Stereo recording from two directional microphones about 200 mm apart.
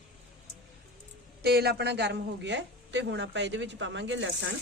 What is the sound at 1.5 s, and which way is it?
A woman's voice, 55° right (ahead or behind).